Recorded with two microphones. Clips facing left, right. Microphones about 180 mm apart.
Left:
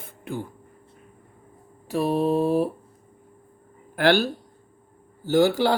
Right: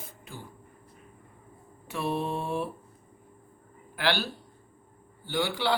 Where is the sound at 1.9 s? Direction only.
35° left (ahead or behind).